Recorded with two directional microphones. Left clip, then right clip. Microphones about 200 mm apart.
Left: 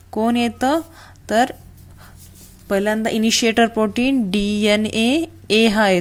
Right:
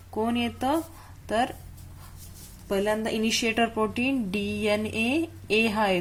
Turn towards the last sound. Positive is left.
turn(degrees=40)  # may be behind; listen again after turning